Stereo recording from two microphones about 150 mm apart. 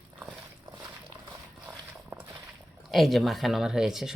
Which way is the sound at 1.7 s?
10° right (ahead or behind).